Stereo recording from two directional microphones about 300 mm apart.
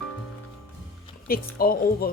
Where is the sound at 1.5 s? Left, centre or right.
Left.